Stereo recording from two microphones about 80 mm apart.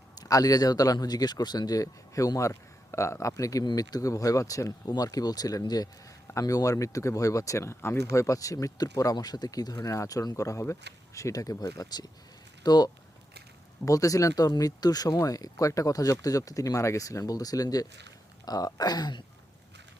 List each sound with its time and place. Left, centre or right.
0.2 s speech: left
3.6 s speech: left
13.8 s speech: left